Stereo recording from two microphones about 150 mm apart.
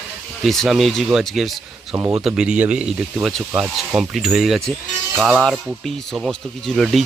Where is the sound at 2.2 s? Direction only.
5° right (ahead or behind).